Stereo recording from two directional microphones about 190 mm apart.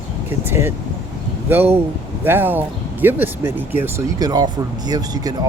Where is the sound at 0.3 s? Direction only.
10° right (ahead or behind).